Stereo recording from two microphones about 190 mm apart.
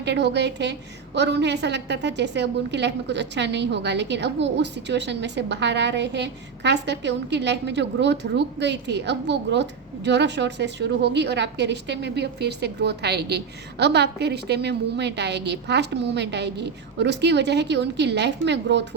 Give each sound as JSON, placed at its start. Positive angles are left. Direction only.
{"t": 0.0, "sound": "a woman's voice", "side_deg": -65}